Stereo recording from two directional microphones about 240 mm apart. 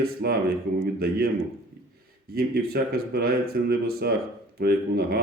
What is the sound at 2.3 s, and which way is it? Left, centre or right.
Speech, right.